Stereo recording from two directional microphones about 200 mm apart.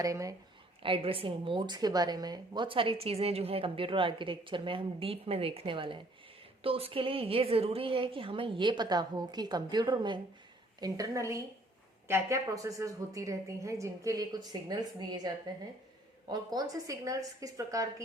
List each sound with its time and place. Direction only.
0.0 s a woman's voice: 15° right (ahead or behind)
0.8 s a woman's voice: 25° right (ahead or behind)
16.3 s a woman's voice: 20° right (ahead or behind)